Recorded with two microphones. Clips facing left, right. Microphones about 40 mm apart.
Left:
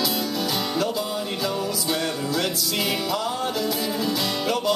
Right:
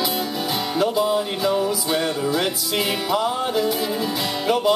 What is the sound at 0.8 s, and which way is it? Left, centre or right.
Music, centre.